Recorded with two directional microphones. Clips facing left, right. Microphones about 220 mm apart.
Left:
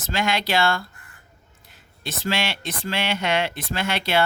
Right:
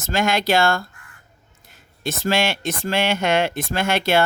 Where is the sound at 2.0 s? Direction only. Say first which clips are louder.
Right 5 dB; 45° right (ahead or behind).